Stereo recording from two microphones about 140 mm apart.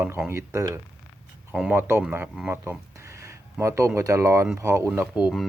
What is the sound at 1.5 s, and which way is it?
Speech, 5° right (ahead or behind).